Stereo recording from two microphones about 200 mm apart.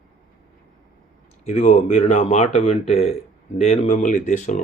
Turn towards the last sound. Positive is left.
turn(degrees=35)  # may be behind; listen again after turning